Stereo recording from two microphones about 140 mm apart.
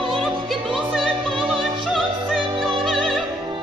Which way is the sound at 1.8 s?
Centre (ahead or behind).